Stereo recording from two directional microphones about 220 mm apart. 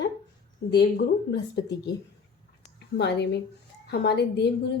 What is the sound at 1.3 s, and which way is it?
A woman's voice, 50° left (ahead or behind).